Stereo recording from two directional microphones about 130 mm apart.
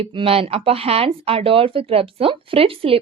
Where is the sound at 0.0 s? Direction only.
45° right (ahead or behind).